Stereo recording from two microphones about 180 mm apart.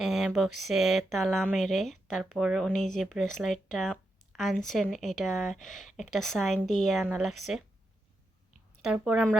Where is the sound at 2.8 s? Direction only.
45° left (ahead or behind).